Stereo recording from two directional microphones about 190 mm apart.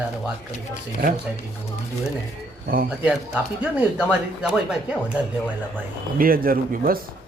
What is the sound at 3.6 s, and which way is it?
A woman's voice, 5° right (ahead or behind).